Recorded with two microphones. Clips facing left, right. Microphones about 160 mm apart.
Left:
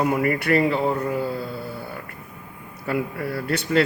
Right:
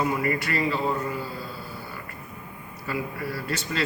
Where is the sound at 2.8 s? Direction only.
60° left (ahead or behind).